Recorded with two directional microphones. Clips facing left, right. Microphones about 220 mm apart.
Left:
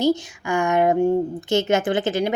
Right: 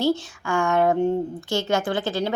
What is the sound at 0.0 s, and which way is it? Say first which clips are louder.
Speech: left 2 dB; 15° left (ahead or behind).